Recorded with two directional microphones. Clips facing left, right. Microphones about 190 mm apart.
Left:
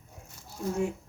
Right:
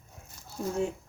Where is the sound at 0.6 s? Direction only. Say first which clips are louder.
Even; 35° right (ahead or behind).